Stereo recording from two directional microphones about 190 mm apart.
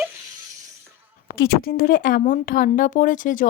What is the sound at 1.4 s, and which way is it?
Speech, 50° left (ahead or behind).